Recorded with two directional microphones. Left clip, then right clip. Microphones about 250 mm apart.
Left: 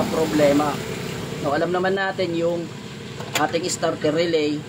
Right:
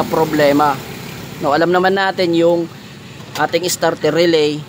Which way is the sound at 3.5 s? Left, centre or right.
Right.